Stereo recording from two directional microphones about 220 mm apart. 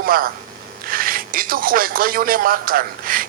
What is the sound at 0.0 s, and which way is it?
Speech, 40° right (ahead or behind).